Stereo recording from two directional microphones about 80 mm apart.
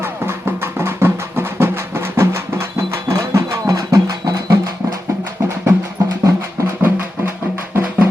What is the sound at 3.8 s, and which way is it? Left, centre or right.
Music, right.